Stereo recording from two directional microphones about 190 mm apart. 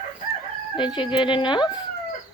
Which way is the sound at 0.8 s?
25° left (ahead or behind).